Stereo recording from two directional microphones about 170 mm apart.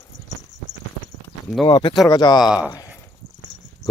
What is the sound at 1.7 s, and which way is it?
Speech, 25° left (ahead or behind).